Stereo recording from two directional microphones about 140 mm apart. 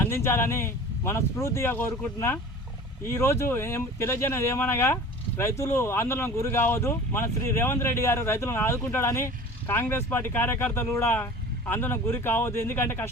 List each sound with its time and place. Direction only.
0.0 s speech: 15° left (ahead or behind)